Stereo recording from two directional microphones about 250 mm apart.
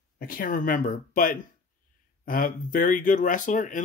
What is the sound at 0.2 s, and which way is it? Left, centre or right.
Speech, left.